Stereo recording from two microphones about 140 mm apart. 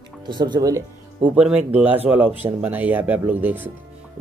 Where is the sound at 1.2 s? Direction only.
10° right (ahead or behind).